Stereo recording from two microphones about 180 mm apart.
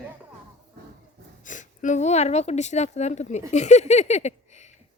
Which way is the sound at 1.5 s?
45° left (ahead or behind).